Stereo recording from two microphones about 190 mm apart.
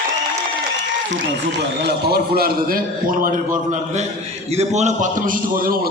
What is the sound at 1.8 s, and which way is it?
A man's voice, 60° right (ahead or behind).